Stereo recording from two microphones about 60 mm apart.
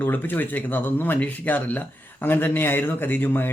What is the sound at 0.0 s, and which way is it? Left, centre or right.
Speech, left.